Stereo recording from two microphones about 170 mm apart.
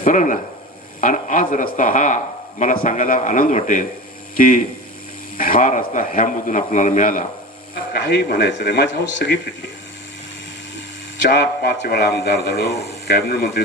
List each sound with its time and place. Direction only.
0.0 s speech: 50° left (ahead or behind)
7.9 s speech: 75° left (ahead or behind)
11.3 s speech: 75° left (ahead or behind)